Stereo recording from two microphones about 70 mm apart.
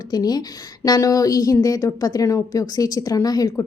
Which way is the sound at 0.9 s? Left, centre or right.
Left.